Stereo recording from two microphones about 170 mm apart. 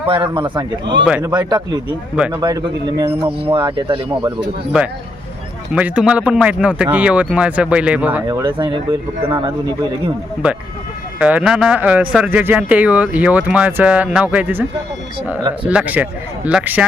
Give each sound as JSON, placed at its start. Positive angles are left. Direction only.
{"t": 0.0, "sound": "speech", "side_deg": -30}
{"t": 5.7, "sound": "speech", "side_deg": -5}
{"t": 8.3, "sound": "speech", "side_deg": -25}
{"t": 11.2, "sound": "speech", "side_deg": -5}